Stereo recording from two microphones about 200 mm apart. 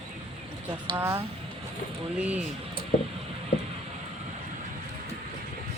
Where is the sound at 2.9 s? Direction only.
45° left (ahead or behind).